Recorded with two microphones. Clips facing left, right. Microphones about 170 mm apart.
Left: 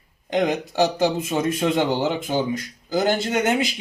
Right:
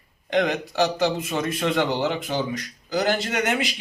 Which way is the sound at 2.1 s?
45° left (ahead or behind).